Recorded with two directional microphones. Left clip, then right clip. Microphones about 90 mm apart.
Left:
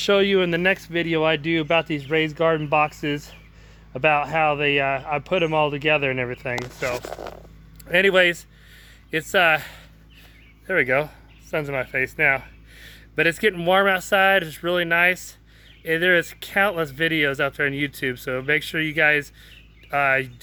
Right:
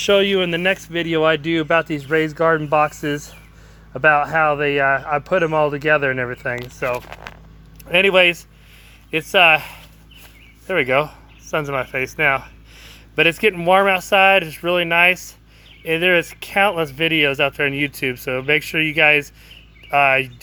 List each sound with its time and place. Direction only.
0.0 s speech: 60° left (ahead or behind)
7.9 s speech: 35° left (ahead or behind)
10.7 s speech: 15° left (ahead or behind)